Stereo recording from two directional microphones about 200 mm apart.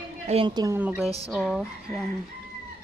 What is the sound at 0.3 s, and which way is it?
Speech, 25° right (ahead or behind).